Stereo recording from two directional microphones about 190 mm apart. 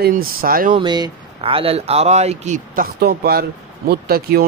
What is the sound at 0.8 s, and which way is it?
Speech, 25° right (ahead or behind).